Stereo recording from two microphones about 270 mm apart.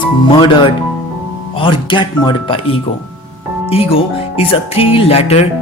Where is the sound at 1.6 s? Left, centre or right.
Centre.